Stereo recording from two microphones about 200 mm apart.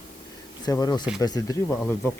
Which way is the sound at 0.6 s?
20° left (ahead or behind).